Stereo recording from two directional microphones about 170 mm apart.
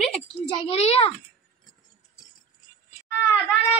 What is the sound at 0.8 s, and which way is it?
Speech, 35° left (ahead or behind).